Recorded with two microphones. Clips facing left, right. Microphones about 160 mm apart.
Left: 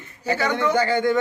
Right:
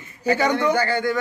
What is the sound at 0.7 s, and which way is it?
Speech, 20° left (ahead or behind).